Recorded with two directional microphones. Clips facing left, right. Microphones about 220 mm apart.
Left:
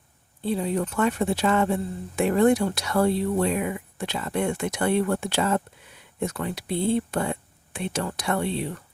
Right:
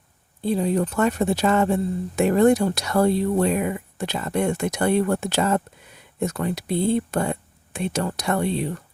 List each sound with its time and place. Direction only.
0.4 s speech: 40° right (ahead or behind)